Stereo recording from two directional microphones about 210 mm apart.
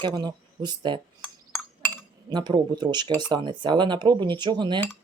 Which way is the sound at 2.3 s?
20° right (ahead or behind).